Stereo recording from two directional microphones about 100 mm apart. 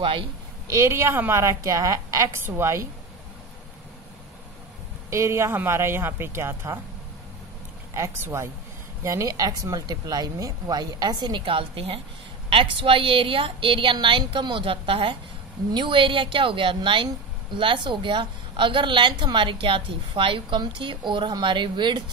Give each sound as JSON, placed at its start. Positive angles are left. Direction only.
{"t": 0.7, "sound": "speech", "side_deg": -30}
{"t": 5.1, "sound": "speech", "side_deg": -30}
{"t": 7.9, "sound": "speech", "side_deg": -25}
{"t": 11.4, "sound": "a woman's voice", "side_deg": -65}